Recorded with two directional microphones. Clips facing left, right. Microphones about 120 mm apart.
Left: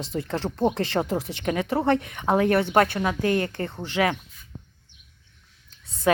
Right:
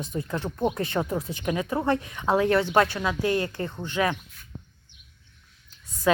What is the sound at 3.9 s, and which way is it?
Speech, 80° left.